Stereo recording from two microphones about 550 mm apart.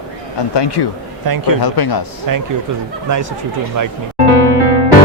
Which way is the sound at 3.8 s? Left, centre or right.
Right.